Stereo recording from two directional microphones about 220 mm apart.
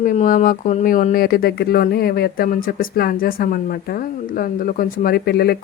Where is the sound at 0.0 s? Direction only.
40° left (ahead or behind).